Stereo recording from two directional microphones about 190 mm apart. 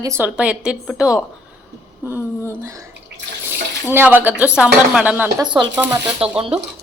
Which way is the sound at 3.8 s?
10° right (ahead or behind).